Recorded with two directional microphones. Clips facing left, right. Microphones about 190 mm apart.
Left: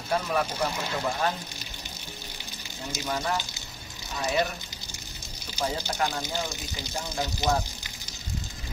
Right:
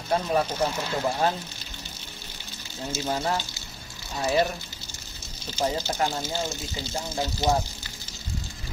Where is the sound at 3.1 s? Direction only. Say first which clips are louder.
Right 2 dB; 35° right (ahead or behind).